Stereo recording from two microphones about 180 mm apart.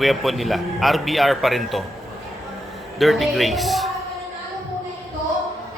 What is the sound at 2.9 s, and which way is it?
Speech, centre (ahead or behind).